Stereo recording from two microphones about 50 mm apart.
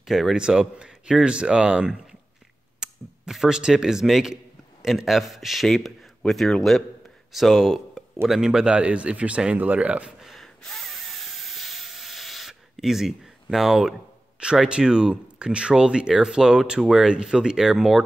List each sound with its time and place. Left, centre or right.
0.0 s a man's voice: centre
0.4 s speech: centre
2.8 s a sound: centre
3.3 s a man's voice: centre; by 10.1 s right
10.4 s a sound: centre
14.7 s speech: centre